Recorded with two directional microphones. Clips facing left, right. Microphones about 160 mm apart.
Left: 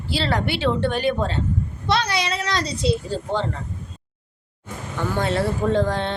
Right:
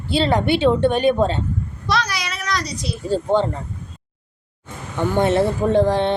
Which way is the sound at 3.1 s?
20° right (ahead or behind).